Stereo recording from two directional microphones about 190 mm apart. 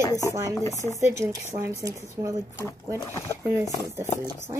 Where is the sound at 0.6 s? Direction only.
15° left (ahead or behind).